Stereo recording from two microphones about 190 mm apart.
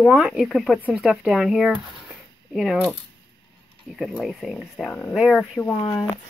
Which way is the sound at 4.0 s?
Centre (ahead or behind).